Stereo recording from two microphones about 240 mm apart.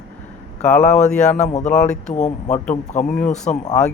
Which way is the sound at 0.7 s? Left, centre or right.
Left.